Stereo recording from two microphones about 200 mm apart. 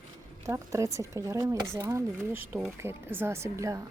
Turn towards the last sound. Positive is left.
turn(degrees=-15)  # may be behind; listen again after turning